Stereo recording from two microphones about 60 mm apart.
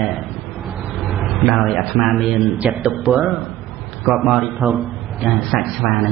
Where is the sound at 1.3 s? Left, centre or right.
Centre.